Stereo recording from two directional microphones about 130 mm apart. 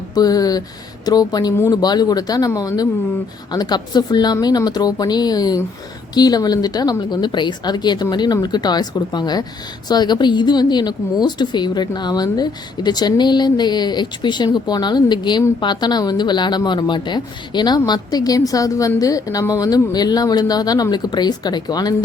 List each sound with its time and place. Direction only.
0.1 s a woman's voice: 30° left (ahead or behind)